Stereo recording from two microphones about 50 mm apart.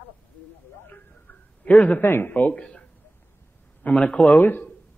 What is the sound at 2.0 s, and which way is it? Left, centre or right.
Speech, left.